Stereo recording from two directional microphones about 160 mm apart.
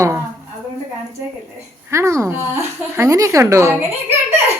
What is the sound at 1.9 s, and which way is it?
A woman's voice, 15° right (ahead or behind).